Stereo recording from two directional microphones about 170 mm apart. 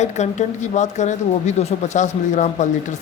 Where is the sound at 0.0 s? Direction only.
45° left (ahead or behind).